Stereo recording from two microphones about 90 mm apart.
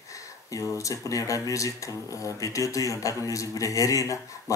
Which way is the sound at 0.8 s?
40° left (ahead or behind).